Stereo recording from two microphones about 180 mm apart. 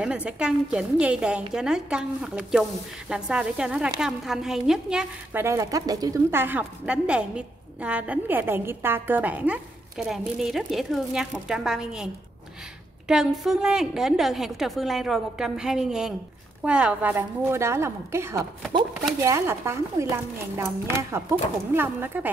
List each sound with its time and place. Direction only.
0.0 s a woman's voice: 5° right (ahead or behind)
13.1 s a woman's voice: centre (ahead or behind)